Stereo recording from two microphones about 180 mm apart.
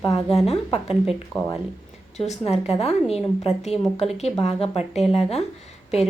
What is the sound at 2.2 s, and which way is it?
Speech, 35° left (ahead or behind).